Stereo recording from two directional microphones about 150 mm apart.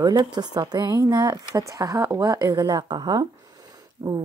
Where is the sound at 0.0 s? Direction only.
30° right (ahead or behind).